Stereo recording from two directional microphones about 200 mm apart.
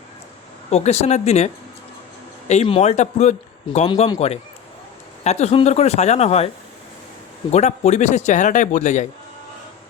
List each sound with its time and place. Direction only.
0.7 s speech: 35° left (ahead or behind)
2.5 s speech: 30° left (ahead or behind)
7.5 s speech: 35° left (ahead or behind)